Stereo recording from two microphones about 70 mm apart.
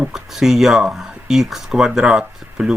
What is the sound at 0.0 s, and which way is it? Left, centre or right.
Speech, centre.